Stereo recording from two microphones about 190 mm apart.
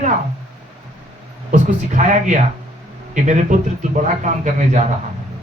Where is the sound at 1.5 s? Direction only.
40° right (ahead or behind).